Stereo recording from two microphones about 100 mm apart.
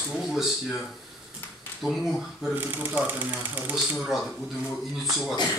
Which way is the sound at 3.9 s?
Centre (ahead or behind).